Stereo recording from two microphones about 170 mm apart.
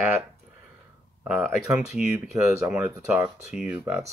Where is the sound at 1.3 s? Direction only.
10° right (ahead or behind).